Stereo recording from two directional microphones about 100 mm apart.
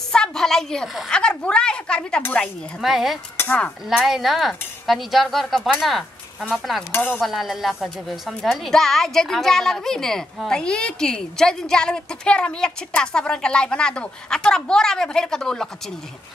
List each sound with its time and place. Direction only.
0.1 s a woman's voice: 5° left (ahead or behind)
2.8 s a woman's voice: 5° right (ahead or behind)
3.3 s speech: 15° left (ahead or behind)
3.9 s a woman's voice: centre (ahead or behind)
6.9 s dishes: 20° left (ahead or behind)
7.2 s a woman's voice: centre (ahead or behind)